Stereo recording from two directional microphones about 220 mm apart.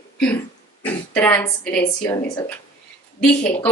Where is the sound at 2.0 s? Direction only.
20° left (ahead or behind).